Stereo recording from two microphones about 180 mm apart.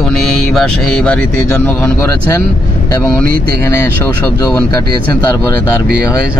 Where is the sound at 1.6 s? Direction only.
10° left (ahead or behind).